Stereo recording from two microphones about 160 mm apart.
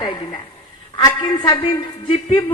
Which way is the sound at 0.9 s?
25° left (ahead or behind).